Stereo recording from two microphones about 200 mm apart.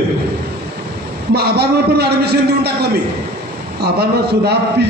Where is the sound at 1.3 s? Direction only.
55° right (ahead or behind).